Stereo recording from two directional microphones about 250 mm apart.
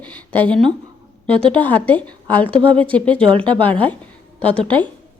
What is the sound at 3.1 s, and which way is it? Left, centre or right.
Speech, right.